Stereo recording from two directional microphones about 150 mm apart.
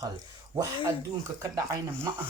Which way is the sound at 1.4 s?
20° right (ahead or behind).